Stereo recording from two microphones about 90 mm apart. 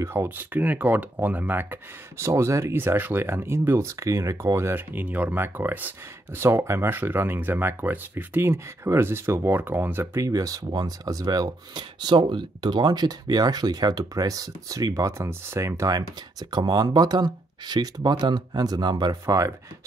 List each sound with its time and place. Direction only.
0.0 s speech: 30° right (ahead or behind)
10.2 s speech: 40° right (ahead or behind)
16.0 s speech: 50° right (ahead or behind)
19.2 s speech: 35° right (ahead or behind)